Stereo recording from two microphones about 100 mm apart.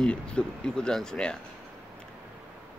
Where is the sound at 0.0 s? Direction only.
10° left (ahead or behind).